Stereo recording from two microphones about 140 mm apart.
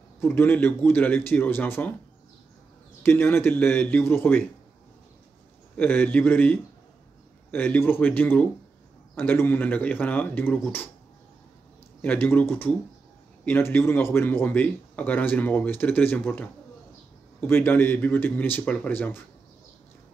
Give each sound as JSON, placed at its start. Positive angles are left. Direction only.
{"t": 0.2, "sound": "speech", "side_deg": 15}
{"t": 3.0, "sound": "speech", "side_deg": 15}
{"t": 5.8, "sound": "speech", "side_deg": 15}
{"t": 12.0, "sound": "speech", "side_deg": 15}